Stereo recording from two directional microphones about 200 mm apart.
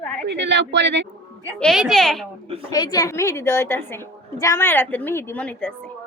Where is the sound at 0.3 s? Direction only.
60° right (ahead or behind).